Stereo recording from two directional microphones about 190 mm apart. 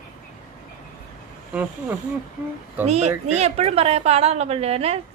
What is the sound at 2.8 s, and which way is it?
A woman's voice, 35° right (ahead or behind).